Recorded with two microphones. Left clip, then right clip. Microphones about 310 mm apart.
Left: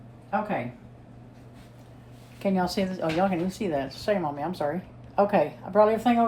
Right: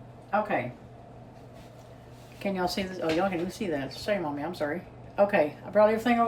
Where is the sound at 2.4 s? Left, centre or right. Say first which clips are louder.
Left 3 dB; centre.